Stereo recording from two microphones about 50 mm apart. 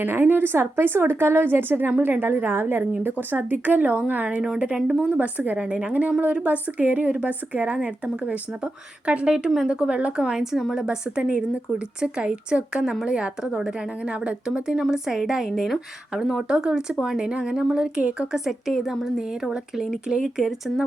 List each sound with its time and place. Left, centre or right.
0.0 s a woman's voice: right
4.7 s speech: centre
5.1 s a woman's voice: right
5.5 s a woman's voice: right
7.8 s a woman's voice: centre
10.8 s a woman's voice: centre
12.8 s speech: centre
13.1 s a woman's voice: right; by 16.5 s centre
16.5 s speech: centre
18.3 s speech: centre